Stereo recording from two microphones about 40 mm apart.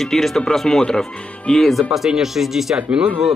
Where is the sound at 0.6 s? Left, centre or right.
Centre.